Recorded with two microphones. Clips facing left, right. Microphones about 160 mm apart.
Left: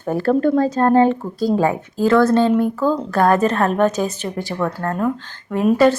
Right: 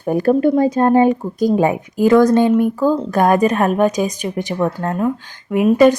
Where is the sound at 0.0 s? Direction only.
15° right (ahead or behind).